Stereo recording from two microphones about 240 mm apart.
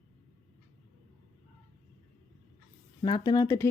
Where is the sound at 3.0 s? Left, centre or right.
Centre.